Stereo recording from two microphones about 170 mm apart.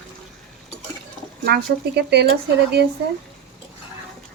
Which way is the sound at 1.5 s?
70° right (ahead or behind).